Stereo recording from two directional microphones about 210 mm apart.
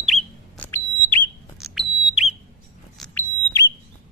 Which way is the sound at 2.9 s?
5° left (ahead or behind).